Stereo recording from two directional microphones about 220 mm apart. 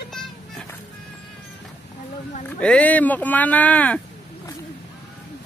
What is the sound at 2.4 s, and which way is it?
Speech, 5° left (ahead or behind).